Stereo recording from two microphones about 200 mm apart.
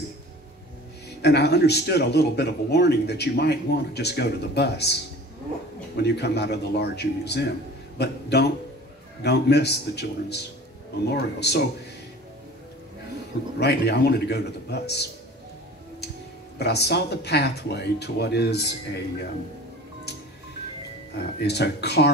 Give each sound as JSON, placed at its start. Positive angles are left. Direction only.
{"t": 1.2, "sound": "a man's voice", "side_deg": 55}
{"t": 13.6, "sound": "a man's voice", "side_deg": 55}
{"t": 16.5, "sound": "a man's voice", "side_deg": 55}
{"t": 21.2, "sound": "a man's voice", "side_deg": 55}